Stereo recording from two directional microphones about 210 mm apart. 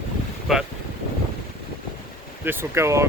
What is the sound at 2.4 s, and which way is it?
Speech, 10° right (ahead or behind).